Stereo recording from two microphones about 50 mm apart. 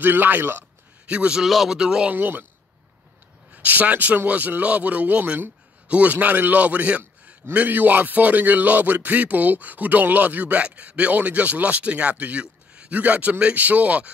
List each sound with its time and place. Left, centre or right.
0.0 s speech: right
1.0 s a man's voice: right
1.4 s speech: centre
1.8 s speech: centre
2.0 s speech: right
3.5 s speech: right